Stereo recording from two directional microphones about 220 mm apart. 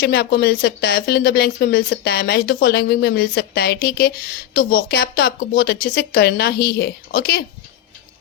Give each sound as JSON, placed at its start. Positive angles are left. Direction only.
{"t": 0.0, "sound": "speech", "side_deg": 45}